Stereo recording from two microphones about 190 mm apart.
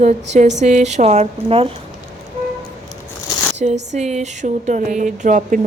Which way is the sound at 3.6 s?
35° right (ahead or behind).